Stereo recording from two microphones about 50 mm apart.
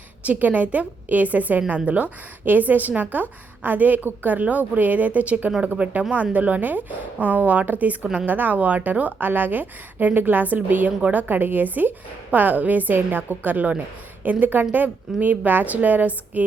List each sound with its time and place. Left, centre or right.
0.3 s a woman's voice: right